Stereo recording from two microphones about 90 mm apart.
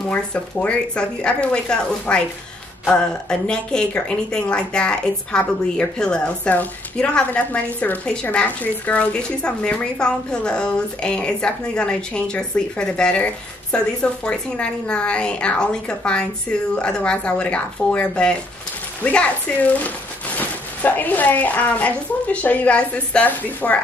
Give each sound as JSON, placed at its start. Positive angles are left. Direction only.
{"t": 0.1, "sound": "a woman's voice", "side_deg": 15}